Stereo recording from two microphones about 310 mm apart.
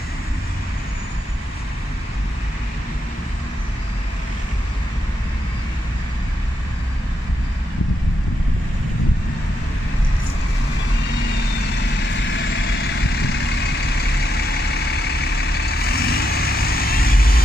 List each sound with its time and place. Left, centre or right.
12.2 s vehicle: left